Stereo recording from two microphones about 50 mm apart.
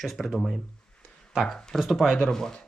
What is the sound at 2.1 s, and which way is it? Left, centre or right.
Speech, centre.